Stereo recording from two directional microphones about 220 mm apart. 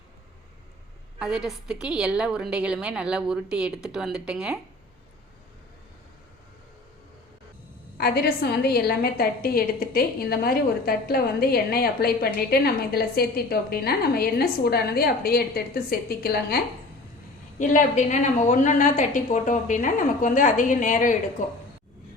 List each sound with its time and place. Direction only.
1.2 s a woman's voice: 5° right (ahead or behind)
7.9 s a woman's voice: 45° left (ahead or behind)
17.6 s a woman's voice: 35° left (ahead or behind)